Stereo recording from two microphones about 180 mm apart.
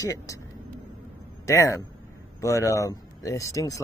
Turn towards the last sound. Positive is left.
turn(degrees=20)  # may be behind; listen again after turning